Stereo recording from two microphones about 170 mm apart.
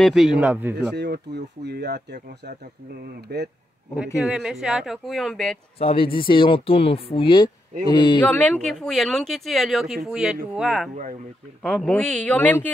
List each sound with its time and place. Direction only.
0.0 s speech: centre (ahead or behind)
0.9 s speech: 80° right
3.3 s speech: 75° right (ahead or behind)
4.2 s speech: 5° right (ahead or behind)
5.8 s speech: 35° left (ahead or behind)
7.8 s a sound: 25° left (ahead or behind)
8.2 s speech: 10° left (ahead or behind)